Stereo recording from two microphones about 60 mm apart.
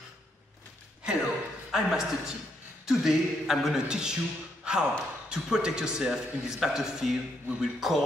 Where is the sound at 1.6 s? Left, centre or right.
Centre.